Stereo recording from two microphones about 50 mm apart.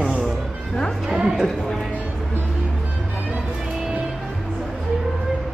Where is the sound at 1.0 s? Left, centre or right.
Centre.